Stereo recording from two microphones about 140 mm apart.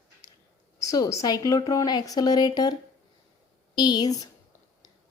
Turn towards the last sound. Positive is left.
turn(degrees=30)  # may be behind; listen again after turning